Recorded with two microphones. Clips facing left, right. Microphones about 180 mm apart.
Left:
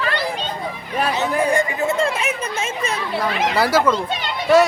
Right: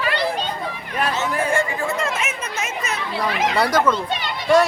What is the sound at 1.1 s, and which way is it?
Chatter, 15° left (ahead or behind).